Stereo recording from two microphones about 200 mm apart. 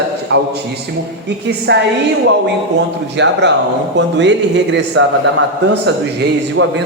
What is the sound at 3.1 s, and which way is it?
Speech, 60° right (ahead or behind).